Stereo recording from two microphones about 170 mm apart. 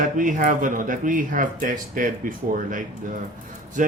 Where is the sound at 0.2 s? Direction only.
50° right (ahead or behind).